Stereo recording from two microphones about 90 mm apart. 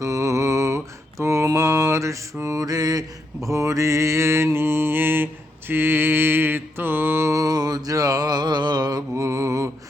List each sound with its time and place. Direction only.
0.0 s mantra: 40° right (ahead or behind)